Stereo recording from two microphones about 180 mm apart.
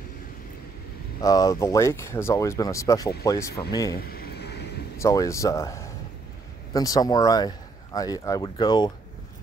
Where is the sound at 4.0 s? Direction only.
60° left (ahead or behind).